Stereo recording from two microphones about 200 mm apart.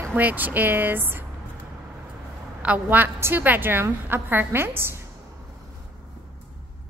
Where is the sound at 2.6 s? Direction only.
10° right (ahead or behind).